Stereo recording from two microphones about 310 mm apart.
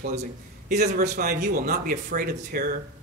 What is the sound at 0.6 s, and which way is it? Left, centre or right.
A man's voice, right.